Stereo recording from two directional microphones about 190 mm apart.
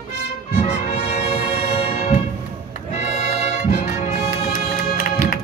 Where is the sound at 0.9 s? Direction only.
35° left (ahead or behind).